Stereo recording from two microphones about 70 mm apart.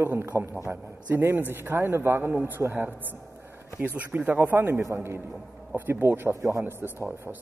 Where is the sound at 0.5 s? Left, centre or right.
Right.